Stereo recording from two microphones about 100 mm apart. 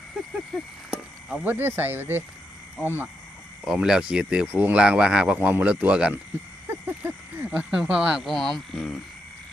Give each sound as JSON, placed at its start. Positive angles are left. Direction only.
{"t": 0.5, "sound": "speech", "side_deg": -5}
{"t": 1.5, "sound": "speech", "side_deg": -20}
{"t": 3.6, "sound": "speech", "side_deg": -5}
{"t": 6.7, "sound": "speech", "side_deg": -20}